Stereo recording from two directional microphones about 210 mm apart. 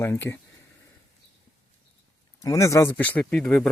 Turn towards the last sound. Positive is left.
turn(degrees=0)  # may be behind; listen again after turning